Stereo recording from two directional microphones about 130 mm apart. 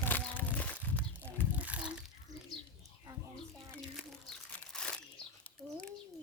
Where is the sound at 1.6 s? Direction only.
10° right (ahead or behind).